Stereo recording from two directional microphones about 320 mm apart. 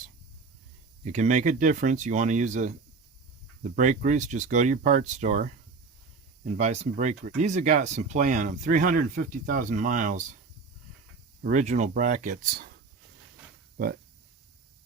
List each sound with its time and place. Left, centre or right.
1.0 s speech: right
11.4 s speech: right